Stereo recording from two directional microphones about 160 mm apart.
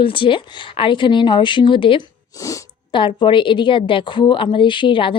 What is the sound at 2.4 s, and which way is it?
Sneeze, 20° left (ahead or behind).